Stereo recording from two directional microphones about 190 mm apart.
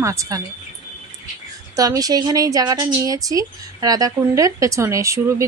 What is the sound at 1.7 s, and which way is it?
A woman's voice, 20° right (ahead or behind).